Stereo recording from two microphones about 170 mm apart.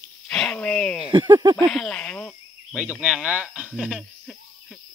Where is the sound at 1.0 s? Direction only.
25° right (ahead or behind).